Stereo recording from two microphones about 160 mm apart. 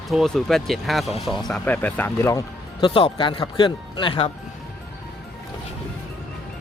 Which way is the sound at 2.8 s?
30° left (ahead or behind).